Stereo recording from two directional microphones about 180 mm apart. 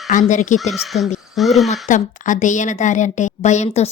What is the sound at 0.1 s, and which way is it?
Speech, 45° left (ahead or behind).